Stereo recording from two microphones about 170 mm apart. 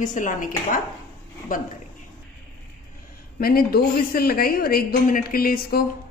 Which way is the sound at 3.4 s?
60° left (ahead or behind).